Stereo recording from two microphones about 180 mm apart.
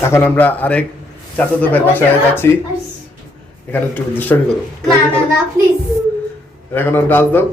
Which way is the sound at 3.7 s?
10° left (ahead or behind).